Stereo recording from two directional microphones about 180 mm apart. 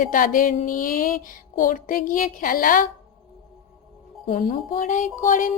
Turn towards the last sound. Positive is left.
turn(degrees=45)  # may be behind; listen again after turning